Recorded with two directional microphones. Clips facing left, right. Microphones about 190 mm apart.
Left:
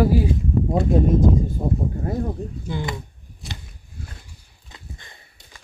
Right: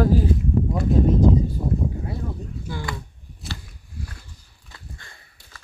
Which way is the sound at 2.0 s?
45° left (ahead or behind).